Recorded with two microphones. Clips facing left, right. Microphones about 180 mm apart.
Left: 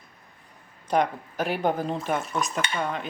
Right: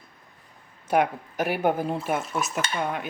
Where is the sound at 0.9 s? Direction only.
10° right (ahead or behind).